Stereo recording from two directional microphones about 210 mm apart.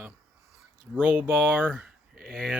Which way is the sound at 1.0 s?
10° right (ahead or behind).